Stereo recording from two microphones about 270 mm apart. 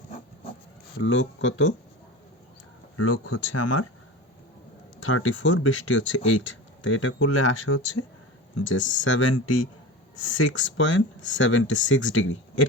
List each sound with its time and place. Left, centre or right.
0.9 s speech: left
3.0 s speech: left
4.9 s speech: left